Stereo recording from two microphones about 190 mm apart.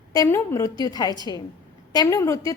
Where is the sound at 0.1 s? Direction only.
15° left (ahead or behind).